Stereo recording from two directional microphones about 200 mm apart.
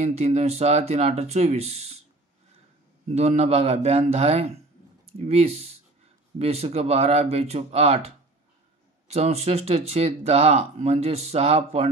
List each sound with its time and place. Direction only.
0.0 s speech: 35° right (ahead or behind)
3.2 s speech: 30° right (ahead or behind)
9.0 s speech: 30° right (ahead or behind)